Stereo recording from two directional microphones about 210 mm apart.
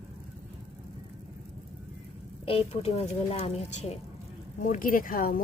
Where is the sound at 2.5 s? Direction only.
25° left (ahead or behind).